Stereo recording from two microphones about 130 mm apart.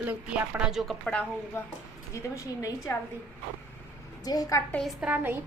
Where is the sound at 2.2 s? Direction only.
25° left (ahead or behind).